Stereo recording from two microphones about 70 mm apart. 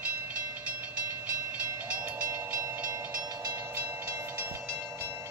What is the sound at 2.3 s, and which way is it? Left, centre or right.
Train, right.